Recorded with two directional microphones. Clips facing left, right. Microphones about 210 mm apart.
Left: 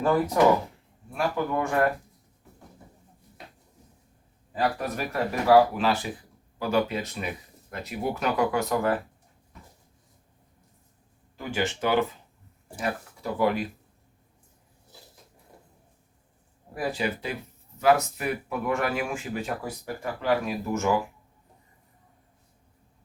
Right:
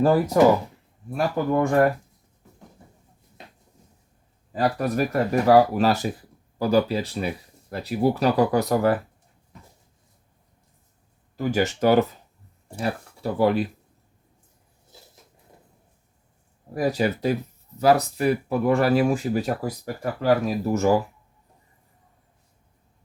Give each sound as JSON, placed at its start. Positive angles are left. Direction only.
{"t": 1.1, "sound": "speech", "side_deg": -35}
{"t": 4.5, "sound": "speech", "side_deg": -40}
{"t": 11.3, "sound": "speech", "side_deg": -40}
{"t": 16.7, "sound": "speech", "side_deg": -40}